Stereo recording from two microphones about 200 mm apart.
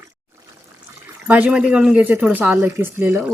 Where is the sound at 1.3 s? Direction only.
5° right (ahead or behind).